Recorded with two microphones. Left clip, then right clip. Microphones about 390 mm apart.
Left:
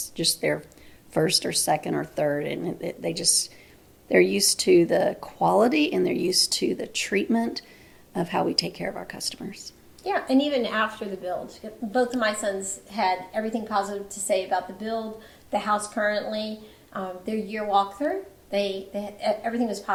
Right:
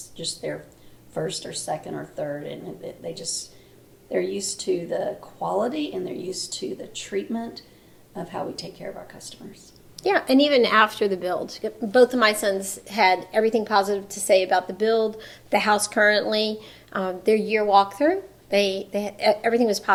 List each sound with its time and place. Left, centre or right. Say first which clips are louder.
0.5 s speech: left 5 dB; left
4.4 s speech: left 7 dB; left
10.0 s speech: right 5 dB; right